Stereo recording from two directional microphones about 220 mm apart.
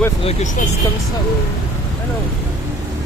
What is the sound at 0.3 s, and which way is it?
Speech, 30° left (ahead or behind).